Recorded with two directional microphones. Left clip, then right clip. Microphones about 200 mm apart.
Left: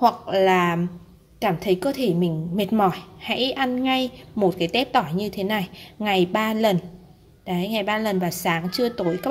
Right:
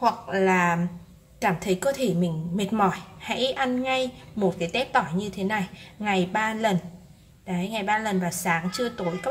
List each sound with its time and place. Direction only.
0.0 s a woman's voice: 40° left (ahead or behind)